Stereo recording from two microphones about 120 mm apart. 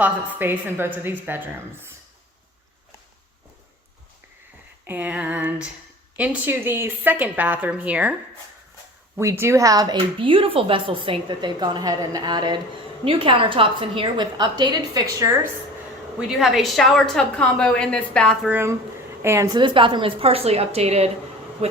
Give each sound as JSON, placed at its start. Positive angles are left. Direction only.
{"t": 0.0, "sound": "speech", "side_deg": -15}
{"t": 4.9, "sound": "speech", "side_deg": -10}
{"t": 9.1, "sound": "speech", "side_deg": -20}
{"t": 10.2, "sound": "a woman's voice", "side_deg": -50}
{"t": 16.1, "sound": "a woman's voice", "side_deg": -5}
{"t": 19.2, "sound": "speech", "side_deg": -20}
{"t": 19.5, "sound": "a woman's voice", "side_deg": -45}